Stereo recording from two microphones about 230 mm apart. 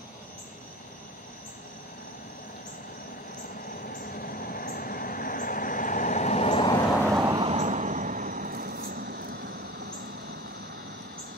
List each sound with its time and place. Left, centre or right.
3.8 s train: left
7.2 s vehicle: centre; by 9.5 s right